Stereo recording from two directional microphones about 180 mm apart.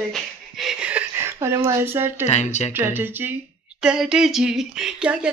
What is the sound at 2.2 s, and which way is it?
Speech, 40° left (ahead or behind).